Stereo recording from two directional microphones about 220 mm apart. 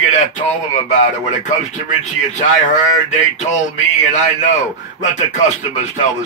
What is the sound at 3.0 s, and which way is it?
Speech, 35° left (ahead or behind).